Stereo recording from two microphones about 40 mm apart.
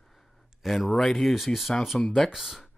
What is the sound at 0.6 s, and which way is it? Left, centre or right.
Speech, centre.